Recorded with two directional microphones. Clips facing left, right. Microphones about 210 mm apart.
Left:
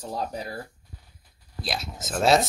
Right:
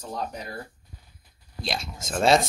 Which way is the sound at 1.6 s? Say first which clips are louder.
Even; centre (ahead or behind).